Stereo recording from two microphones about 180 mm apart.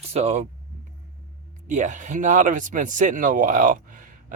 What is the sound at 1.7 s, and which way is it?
Speech, 45° right (ahead or behind).